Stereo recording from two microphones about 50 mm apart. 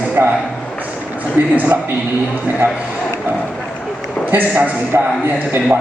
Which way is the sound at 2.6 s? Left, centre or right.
Right.